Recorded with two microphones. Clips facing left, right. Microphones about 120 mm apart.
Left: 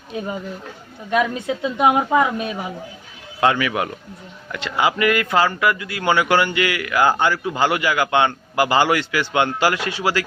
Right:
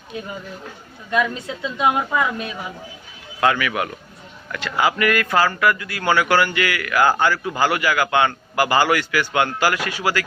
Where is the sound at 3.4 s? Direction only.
25° left (ahead or behind).